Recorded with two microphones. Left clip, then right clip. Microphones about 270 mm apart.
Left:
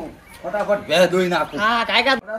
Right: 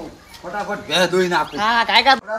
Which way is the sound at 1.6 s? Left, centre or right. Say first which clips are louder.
Right 3 dB; centre.